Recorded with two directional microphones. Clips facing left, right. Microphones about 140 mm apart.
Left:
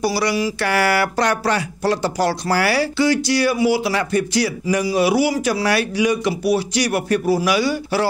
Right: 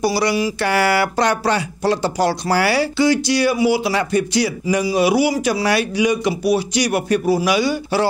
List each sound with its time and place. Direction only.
0.0 s speech: 20° right (ahead or behind)